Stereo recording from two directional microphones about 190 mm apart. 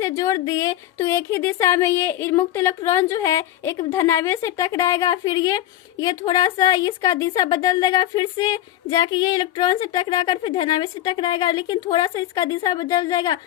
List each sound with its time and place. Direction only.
0.0 s speech: 15° left (ahead or behind)